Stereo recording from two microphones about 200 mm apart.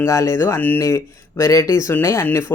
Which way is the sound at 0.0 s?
15° left (ahead or behind).